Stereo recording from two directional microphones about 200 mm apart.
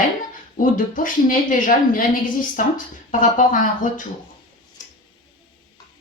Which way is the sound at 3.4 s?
40° left (ahead or behind).